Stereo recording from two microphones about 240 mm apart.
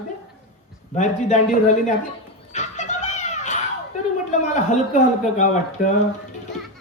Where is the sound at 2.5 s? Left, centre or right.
Left.